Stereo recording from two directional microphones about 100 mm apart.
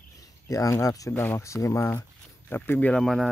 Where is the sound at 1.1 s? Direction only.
20° left (ahead or behind).